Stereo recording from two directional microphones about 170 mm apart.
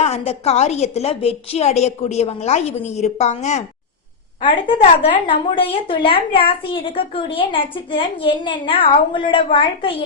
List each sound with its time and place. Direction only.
0.0 s a woman's voice: 40° left (ahead or behind)
4.4 s a woman's voice: 30° left (ahead or behind)